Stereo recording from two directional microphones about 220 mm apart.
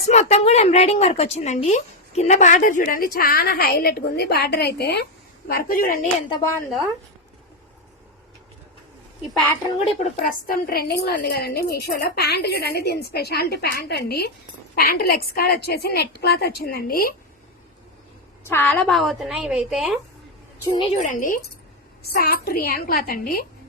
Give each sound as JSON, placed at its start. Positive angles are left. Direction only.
{"t": 0.1, "sound": "a woman's voice", "side_deg": 30}
{"t": 9.8, "sound": "a woman's voice", "side_deg": 35}
{"t": 18.4, "sound": "a woman's voice", "side_deg": 10}
{"t": 20.7, "sound": "a woman's voice", "side_deg": 30}